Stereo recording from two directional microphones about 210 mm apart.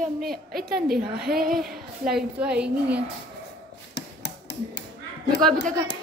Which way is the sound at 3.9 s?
55° left (ahead or behind).